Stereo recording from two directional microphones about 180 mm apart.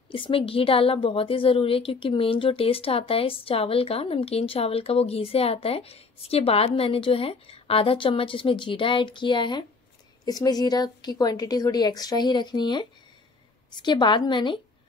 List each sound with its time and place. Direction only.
0.1 s a woman's voice: 30° left (ahead or behind)